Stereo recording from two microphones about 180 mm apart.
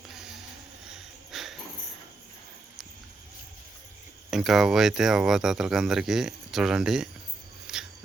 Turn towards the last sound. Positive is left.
turn(degrees=-5)  # may be behind; listen again after turning